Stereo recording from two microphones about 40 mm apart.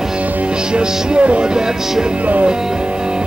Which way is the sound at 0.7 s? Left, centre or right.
Right.